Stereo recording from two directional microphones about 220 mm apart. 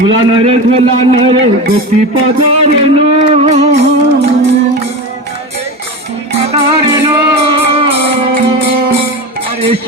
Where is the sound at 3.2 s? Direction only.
30° right (ahead or behind).